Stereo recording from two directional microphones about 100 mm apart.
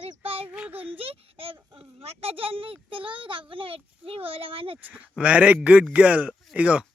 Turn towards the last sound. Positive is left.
turn(degrees=-15)  # may be behind; listen again after turning